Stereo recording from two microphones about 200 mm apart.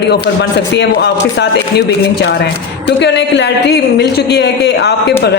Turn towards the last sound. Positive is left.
turn(degrees=55)  # may be behind; listen again after turning